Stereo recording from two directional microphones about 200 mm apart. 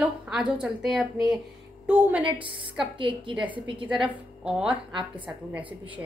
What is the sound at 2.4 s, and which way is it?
A woman's voice, 25° right (ahead or behind).